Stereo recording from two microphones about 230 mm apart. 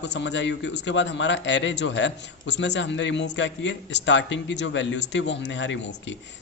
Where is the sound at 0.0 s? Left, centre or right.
Left.